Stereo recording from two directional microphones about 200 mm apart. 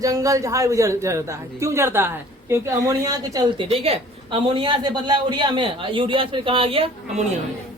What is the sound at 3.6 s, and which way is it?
Speech, 30° right (ahead or behind).